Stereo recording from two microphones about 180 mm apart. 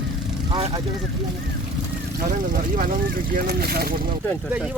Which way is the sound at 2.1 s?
50° right (ahead or behind).